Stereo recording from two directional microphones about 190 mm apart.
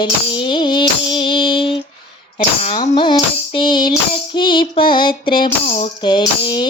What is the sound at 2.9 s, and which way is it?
Music, 25° left (ahead or behind).